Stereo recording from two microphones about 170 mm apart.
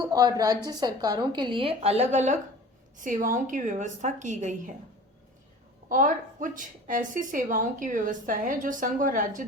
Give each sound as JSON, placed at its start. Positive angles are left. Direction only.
{"t": 0.0, "sound": "a woman's voice", "side_deg": -25}
{"t": 3.0, "sound": "a woman's voice", "side_deg": -55}
{"t": 5.9, "sound": "a woman's voice", "side_deg": -50}